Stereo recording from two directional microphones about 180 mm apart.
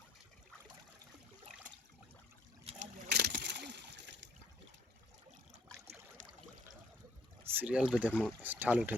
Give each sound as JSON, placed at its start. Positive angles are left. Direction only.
{"t": 2.6, "sound": "boat", "side_deg": -40}
{"t": 3.1, "sound": "water", "side_deg": -65}
{"t": 7.4, "sound": "speech", "side_deg": -10}